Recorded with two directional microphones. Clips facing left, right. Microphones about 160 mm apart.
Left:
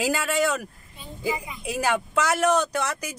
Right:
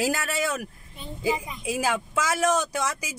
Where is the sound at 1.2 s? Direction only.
5° right (ahead or behind).